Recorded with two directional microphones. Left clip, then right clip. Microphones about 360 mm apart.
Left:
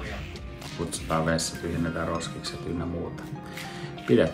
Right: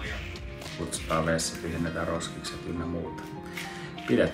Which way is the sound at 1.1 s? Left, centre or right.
Centre.